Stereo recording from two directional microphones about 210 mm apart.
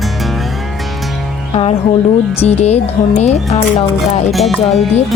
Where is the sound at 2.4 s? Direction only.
30° left (ahead or behind).